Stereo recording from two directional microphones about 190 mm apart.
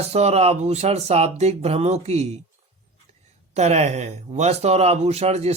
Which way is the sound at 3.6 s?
35° right (ahead or behind).